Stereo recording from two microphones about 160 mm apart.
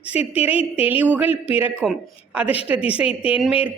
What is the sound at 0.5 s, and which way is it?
Speech, 35° left (ahead or behind).